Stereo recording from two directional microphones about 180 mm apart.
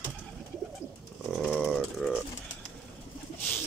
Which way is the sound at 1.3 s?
Centre (ahead or behind).